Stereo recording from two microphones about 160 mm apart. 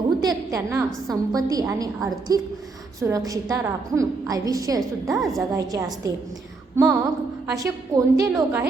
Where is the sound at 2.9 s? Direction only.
20° right (ahead or behind).